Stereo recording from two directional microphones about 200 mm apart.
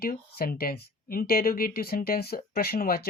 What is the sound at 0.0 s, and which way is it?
Speech, 50° left (ahead or behind).